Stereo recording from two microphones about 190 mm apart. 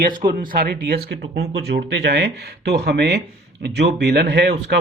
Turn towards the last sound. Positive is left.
turn(degrees=-60)  # may be behind; listen again after turning